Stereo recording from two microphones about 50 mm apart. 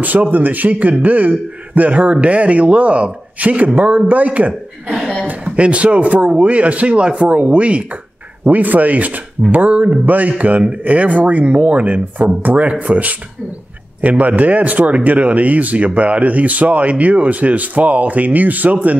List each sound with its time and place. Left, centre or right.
0.0 s speech: right